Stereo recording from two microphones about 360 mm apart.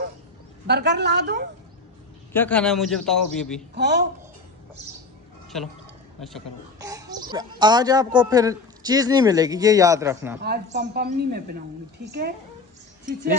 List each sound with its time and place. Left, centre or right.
0.7 s a woman's voice: right
2.3 s a man's voice: centre
3.7 s a woman's voice: right
6.8 s speech: centre
10.4 s a woman's voice: right